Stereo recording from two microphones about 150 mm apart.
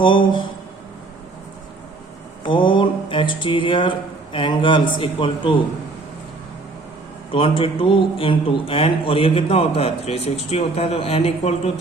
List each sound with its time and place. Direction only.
0.0 s speech: 35° left (ahead or behind)
2.4 s speech: 35° left (ahead or behind)
7.3 s speech: 35° left (ahead or behind)